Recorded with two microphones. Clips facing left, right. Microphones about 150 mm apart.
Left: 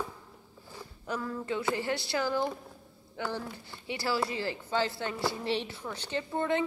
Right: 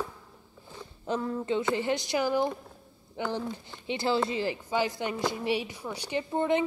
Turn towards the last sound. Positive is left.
turn(degrees=-15)  # may be behind; listen again after turning